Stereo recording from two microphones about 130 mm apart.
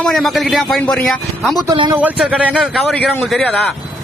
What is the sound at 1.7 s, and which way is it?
Speech, 40° right (ahead or behind).